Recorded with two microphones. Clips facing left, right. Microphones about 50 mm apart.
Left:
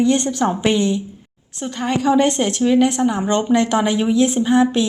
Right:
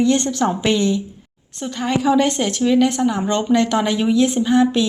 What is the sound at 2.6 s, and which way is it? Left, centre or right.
A woman's voice, centre.